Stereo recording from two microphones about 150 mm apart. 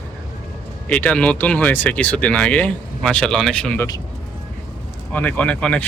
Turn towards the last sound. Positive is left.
turn(degrees=10)  # may be behind; listen again after turning